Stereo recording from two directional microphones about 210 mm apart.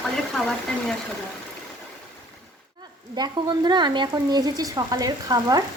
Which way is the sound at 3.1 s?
20° right (ahead or behind).